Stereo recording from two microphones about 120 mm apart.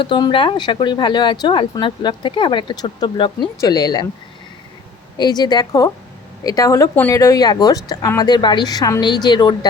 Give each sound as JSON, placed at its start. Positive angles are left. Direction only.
{"t": 0.0, "sound": "speech", "side_deg": 40}
{"t": 5.1, "sound": "speech", "side_deg": 35}